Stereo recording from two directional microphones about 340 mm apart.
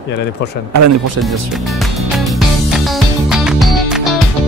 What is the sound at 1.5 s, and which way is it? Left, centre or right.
Music, centre.